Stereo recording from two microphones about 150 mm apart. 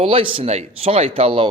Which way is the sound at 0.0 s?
35° right (ahead or behind).